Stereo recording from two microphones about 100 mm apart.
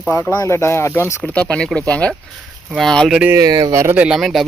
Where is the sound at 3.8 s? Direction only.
15° right (ahead or behind).